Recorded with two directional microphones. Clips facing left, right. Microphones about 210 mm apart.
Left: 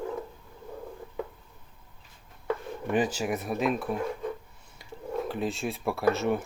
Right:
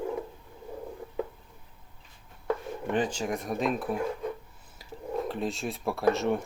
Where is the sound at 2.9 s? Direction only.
10° left (ahead or behind).